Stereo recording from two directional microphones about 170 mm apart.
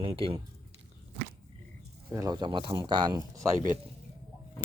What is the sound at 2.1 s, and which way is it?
Speech, 20° right (ahead or behind).